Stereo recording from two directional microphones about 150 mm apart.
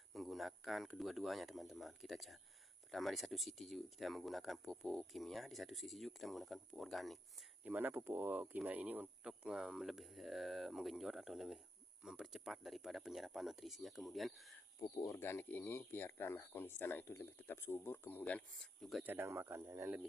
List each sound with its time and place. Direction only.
0.1 s speech: centre (ahead or behind)
7.6 s speech: 10° right (ahead or behind)
14.8 s speech: 20° left (ahead or behind); by 19.0 s centre (ahead or behind)
19.0 s speech: 15° right (ahead or behind)